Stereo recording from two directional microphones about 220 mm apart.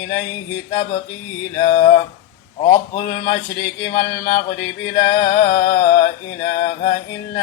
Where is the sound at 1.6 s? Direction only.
25° left (ahead or behind).